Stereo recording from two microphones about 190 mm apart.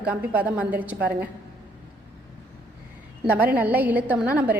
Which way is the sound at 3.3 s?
10° right (ahead or behind).